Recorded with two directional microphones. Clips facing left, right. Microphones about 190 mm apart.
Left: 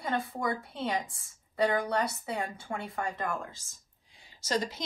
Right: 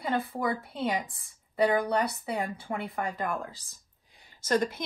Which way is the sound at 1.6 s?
20° right (ahead or behind).